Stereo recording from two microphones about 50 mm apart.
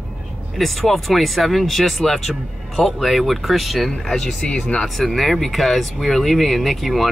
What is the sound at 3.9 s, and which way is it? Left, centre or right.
Speech, centre.